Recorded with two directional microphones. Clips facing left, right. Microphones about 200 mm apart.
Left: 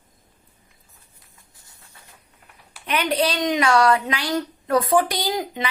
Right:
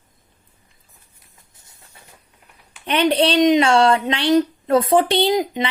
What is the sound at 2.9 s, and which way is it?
A woman's voice, 30° right (ahead or behind).